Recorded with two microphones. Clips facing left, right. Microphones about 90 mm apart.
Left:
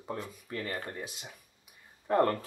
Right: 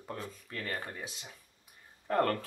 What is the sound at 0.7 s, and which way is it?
Speech, 20° right (ahead or behind).